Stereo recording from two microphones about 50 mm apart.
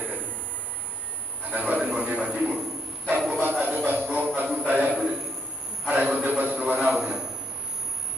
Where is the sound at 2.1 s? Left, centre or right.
Right.